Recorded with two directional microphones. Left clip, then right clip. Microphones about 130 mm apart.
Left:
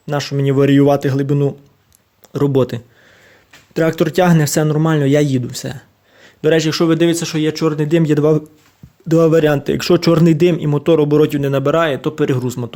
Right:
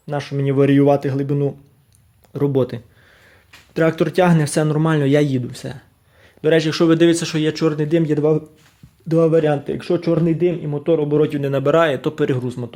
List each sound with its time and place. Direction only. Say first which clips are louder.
0.0 s a man's voice: left 4 dB; 30° left (ahead or behind)
3.8 s speech: left 2 dB; 25° left (ahead or behind)
6.8 s speech: even; 5° left (ahead or behind)
7.7 s speech: left 3 dB; 25° left (ahead or behind)
8.1 s speech: left 4 dB; 55° left (ahead or behind)
9.0 s a man's voice: left 3 dB; 35° left (ahead or behind)
9.7 s speech: left 6 dB; 65° left (ahead or behind)
11.2 s speech: left 4 dB; 25° left (ahead or behind)
12.4 s speech: left 4 dB; 45° left (ahead or behind)